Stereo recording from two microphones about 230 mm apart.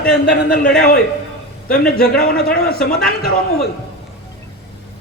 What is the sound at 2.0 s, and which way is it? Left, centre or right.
Speech, left.